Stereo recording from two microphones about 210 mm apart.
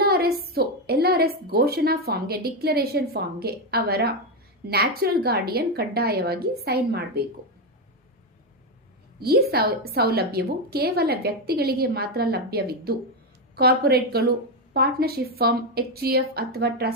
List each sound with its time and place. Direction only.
0.0 s a woman's voice: 50° right (ahead or behind)
9.1 s a woman's voice: 50° right (ahead or behind)